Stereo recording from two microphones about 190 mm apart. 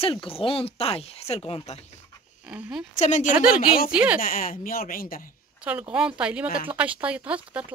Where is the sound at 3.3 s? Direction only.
5° right (ahead or behind).